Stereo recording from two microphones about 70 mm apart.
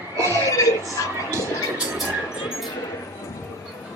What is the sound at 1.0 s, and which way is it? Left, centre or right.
Speech, left.